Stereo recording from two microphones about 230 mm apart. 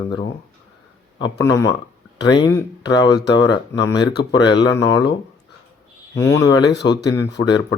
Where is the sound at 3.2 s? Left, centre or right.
Left.